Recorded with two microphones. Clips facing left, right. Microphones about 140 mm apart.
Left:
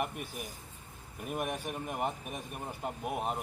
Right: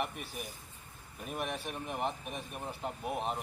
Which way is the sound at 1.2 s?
10° left (ahead or behind).